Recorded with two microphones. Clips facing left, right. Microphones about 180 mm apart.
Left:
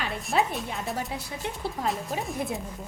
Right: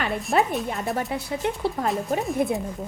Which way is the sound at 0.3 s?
55° right (ahead or behind).